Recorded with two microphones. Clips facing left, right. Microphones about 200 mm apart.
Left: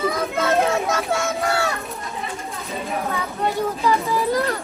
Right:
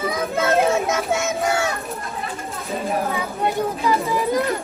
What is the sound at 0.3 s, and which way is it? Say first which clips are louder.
Children playing: right 3 dB; centre (ahead or behind).